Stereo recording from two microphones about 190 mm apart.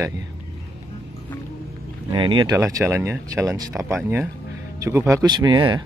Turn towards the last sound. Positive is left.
turn(degrees=-20)  # may be behind; listen again after turning